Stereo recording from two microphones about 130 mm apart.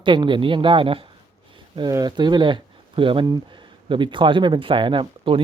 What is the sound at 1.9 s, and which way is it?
Speech, 30° right (ahead or behind).